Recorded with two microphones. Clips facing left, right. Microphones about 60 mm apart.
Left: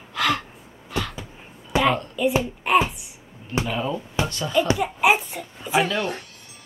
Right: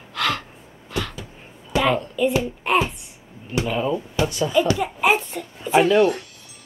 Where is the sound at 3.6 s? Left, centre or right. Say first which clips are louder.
Right 3 dB; centre.